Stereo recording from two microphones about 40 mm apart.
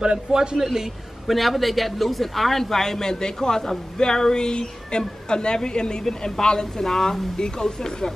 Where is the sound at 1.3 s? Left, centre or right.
Centre.